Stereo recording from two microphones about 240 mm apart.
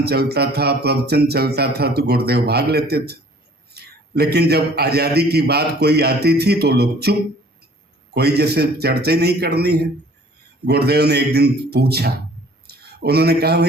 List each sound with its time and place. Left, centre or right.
0.0 s a man's voice: right